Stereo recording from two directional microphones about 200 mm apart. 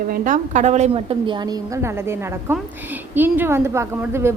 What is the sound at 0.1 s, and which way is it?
A woman's voice, 40° right (ahead or behind).